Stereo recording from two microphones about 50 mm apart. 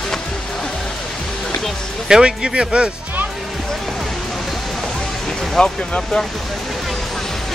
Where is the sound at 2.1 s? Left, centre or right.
Centre.